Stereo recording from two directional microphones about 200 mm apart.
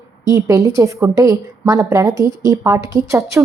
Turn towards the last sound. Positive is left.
turn(degrees=-15)  # may be behind; listen again after turning